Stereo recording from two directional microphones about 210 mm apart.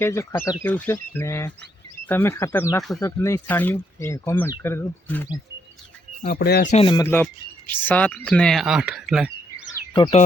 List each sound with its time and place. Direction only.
0.0 s speech: 15° left (ahead or behind)
6.2 s speech: 50° left (ahead or behind)
6.7 s speech: 30° left (ahead or behind)
6.9 s speech: 10° left (ahead or behind)
9.9 s speech: 25° left (ahead or behind)